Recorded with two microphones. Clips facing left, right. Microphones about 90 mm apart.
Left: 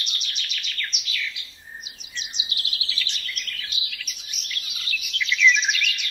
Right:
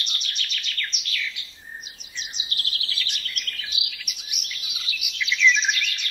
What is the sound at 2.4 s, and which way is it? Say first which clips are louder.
Bird vocalization: right 1 dB; 40° right (ahead or behind).